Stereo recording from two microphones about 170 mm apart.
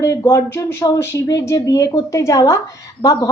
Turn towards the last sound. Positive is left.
turn(degrees=20)  # may be behind; listen again after turning